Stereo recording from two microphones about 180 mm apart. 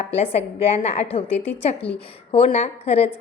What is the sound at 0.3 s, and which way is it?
A woman's voice, 35° left (ahead or behind).